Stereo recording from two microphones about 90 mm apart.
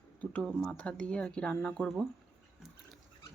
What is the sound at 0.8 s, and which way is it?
Speech, 15° left (ahead or behind).